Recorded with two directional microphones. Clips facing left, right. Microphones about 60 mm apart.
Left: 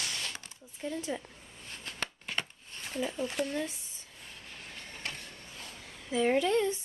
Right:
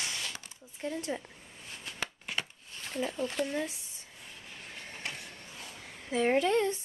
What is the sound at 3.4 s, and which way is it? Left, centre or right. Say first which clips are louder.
Speech: right 1 dB; centre.